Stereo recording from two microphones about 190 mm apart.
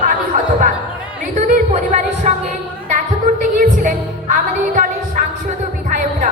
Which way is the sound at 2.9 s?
40° right (ahead or behind).